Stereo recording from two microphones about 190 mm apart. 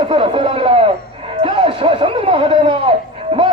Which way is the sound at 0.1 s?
30° right (ahead or behind).